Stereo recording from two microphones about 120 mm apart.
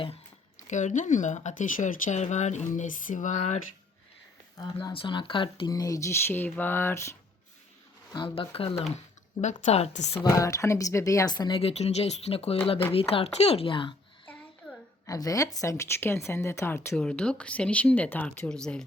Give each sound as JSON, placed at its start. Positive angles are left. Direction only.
{"t": 0.7, "sound": "speech", "side_deg": 90}
{"t": 4.5, "sound": "speech", "side_deg": 35}
{"t": 8.1, "sound": "a woman's voice", "side_deg": 45}
{"t": 9.4, "sound": "speech", "side_deg": 80}
{"t": 10.2, "sound": "speech", "side_deg": 25}
{"t": 11.6, "sound": "a woman's voice", "side_deg": 65}
{"t": 14.6, "sound": "a sound", "side_deg": 10}
{"t": 15.0, "sound": "speech", "side_deg": 30}
{"t": 16.9, "sound": "speech", "side_deg": 5}